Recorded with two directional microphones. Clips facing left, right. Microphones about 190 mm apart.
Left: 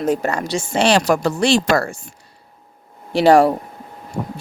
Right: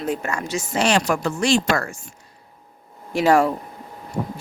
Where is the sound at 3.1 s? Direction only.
35° left (ahead or behind).